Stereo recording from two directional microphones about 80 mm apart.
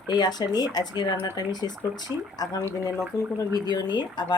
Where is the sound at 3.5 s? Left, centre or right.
Left.